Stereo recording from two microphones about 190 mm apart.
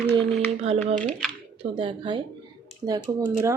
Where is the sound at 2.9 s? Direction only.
15° right (ahead or behind).